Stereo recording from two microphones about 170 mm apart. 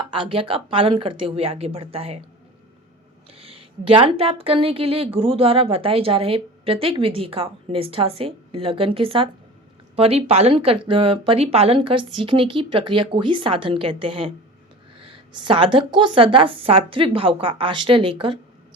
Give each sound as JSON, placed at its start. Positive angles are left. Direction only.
{"t": 0.1, "sound": "a woman's voice", "side_deg": -30}
{"t": 3.3, "sound": "a woman's voice", "side_deg": -35}